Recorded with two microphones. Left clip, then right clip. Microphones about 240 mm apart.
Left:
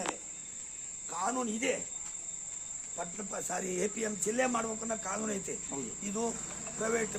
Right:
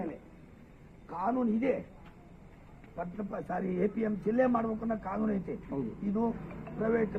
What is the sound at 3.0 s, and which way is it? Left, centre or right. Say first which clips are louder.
Speech: right 2 dB; left.